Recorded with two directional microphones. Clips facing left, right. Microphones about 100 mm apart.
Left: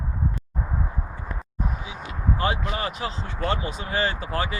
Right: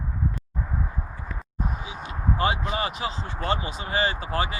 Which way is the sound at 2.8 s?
15° right (ahead or behind).